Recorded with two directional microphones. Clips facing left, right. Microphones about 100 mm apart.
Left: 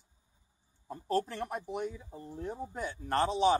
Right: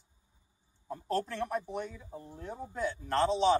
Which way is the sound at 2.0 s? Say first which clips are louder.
Even; 15° right (ahead or behind).